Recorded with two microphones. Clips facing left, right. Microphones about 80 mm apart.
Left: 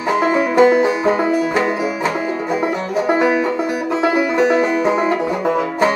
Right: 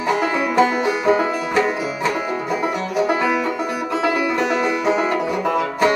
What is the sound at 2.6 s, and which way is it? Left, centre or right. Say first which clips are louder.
Music: even; left.